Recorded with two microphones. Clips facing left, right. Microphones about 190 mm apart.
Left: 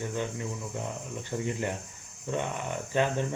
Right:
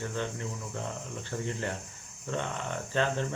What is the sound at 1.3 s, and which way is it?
Speech, 15° left (ahead or behind).